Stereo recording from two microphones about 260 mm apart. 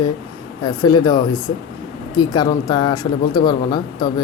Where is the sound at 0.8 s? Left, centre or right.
Centre.